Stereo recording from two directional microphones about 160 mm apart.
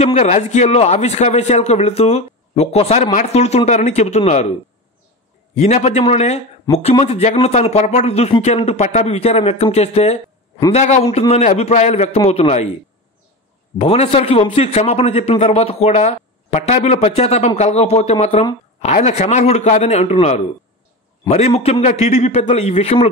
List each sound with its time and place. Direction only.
0.0 s a man's voice: 40° left (ahead or behind)
5.6 s a man's voice: 45° left (ahead or behind)
13.7 s a man's voice: 35° left (ahead or behind)